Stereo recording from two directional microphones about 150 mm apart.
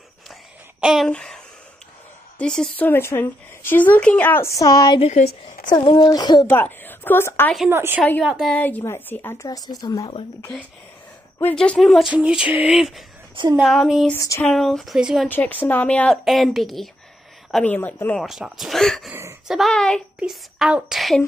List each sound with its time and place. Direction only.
0.7 s speech: 5° right (ahead or behind)
2.9 s a woman's voice: 15° left (ahead or behind)
6.5 s speech: 15° left (ahead or behind)
7.7 s a woman's voice: 15° right (ahead or behind)
8.0 s speech: 5° left (ahead or behind)
8.5 s a woman's voice: 10° left (ahead or behind)
11.5 s speech: 5° left (ahead or behind)
14.1 s a woman's voice: 20° left (ahead or behind)
14.4 s speech: 5° left (ahead or behind)
15.2 s speech: 10° left (ahead or behind)
18.2 s speech: centre (ahead or behind)